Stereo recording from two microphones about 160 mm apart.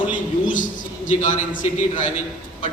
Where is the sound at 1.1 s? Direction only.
50° left (ahead or behind).